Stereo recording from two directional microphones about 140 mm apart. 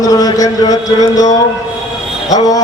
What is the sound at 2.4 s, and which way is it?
Speech, 25° left (ahead or behind).